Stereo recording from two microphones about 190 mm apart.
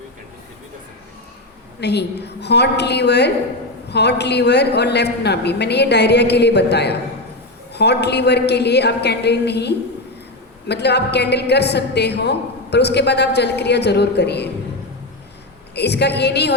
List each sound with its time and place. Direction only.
1.8 s a woman's voice: 60° left (ahead or behind)
15.7 s a woman's voice: 60° left (ahead or behind)